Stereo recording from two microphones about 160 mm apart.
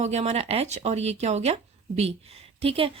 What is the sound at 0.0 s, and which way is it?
A woman's voice, 45° right (ahead or behind).